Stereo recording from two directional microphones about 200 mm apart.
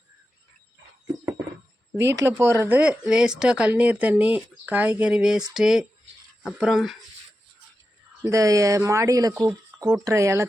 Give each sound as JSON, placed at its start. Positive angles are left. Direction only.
{"t": 2.1, "sound": "speech", "side_deg": -10}
{"t": 8.2, "sound": "speech", "side_deg": -15}